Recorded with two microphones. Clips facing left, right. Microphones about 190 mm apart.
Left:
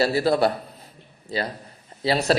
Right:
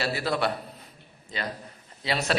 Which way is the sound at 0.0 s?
40° left (ahead or behind).